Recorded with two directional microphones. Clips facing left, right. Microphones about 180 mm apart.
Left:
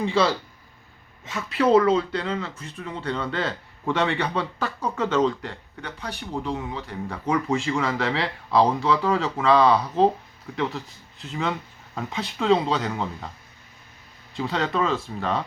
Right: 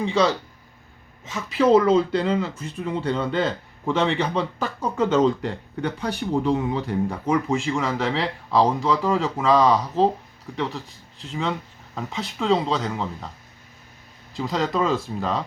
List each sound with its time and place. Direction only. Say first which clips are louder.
0.0 s speech: right 1 dB; centre (ahead or behind)
6.1 s speech: right 7 dB; 45° right (ahead or behind)
6.8 s speech: right 4 dB; 5° right (ahead or behind)
14.3 s speech: right 1 dB; centre (ahead or behind)